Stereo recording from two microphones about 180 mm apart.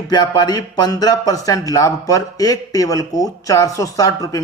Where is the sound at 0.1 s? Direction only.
25° left (ahead or behind).